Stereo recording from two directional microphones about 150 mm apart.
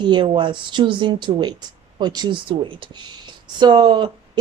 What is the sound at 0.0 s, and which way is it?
Speech, 30° right (ahead or behind).